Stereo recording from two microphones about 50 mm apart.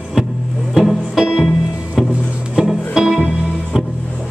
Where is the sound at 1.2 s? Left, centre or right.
Centre.